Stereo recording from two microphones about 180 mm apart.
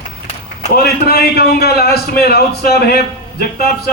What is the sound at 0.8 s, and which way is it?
A man's voice, 60° left (ahead or behind).